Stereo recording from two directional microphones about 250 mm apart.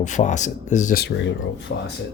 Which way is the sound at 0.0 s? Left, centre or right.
Left.